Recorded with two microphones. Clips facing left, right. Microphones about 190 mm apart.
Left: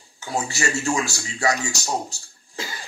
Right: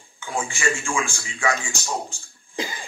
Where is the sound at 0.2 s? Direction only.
40° left (ahead or behind).